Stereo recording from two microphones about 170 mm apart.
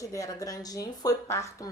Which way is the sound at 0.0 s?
20° left (ahead or behind).